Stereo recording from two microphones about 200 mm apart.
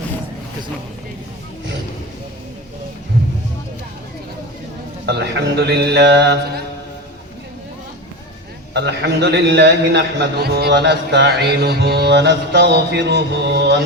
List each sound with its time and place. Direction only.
5.0 s a man's voice: 55° right (ahead or behind)
8.7 s a man's voice: 60° right (ahead or behind)